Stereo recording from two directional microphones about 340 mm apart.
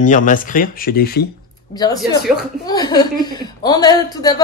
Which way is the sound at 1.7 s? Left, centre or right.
Centre.